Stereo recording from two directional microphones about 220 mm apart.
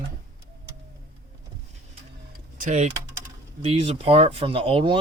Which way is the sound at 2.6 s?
35° right (ahead or behind).